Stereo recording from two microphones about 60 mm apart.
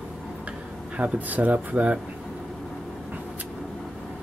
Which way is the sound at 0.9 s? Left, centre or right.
Right.